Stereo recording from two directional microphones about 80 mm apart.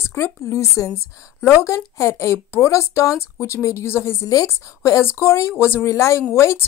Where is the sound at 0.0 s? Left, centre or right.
Left.